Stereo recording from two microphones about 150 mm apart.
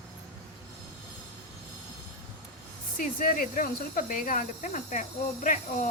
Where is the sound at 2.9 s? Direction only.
70° left (ahead or behind).